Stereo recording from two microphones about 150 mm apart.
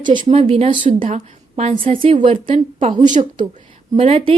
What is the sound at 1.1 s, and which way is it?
A woman's voice, 45° right (ahead or behind).